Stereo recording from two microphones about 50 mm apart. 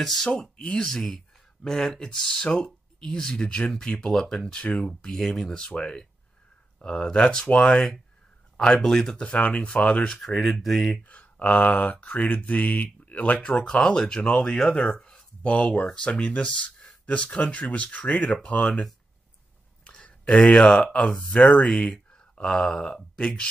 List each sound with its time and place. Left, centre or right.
0.0 s speech: centre
5.6 s speech: centre
7.7 s speech: centre
9.2 s speech: left
10.2 s speech: centre
11.1 s speech: left
14.9 s a sound: centre
15.4 s speech: left
19.8 s a sound: centre
20.1 s speech: left
21.9 s speech: centre